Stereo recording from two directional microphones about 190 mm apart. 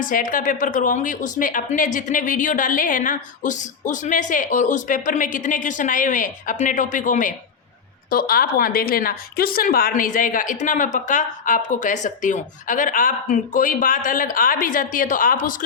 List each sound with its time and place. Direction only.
0.0 s a woman's voice: 45° left (ahead or behind)